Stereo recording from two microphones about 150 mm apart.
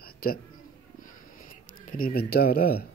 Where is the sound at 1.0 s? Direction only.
65° left (ahead or behind); by 2.8 s 90° left.